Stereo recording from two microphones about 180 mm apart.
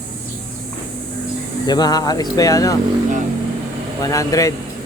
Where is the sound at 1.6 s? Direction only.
20° left (ahead or behind).